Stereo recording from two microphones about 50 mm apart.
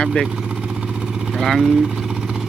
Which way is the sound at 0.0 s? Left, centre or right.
Centre.